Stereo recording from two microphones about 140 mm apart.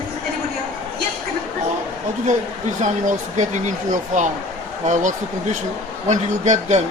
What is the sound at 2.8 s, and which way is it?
A man's voice, 60° right (ahead or behind).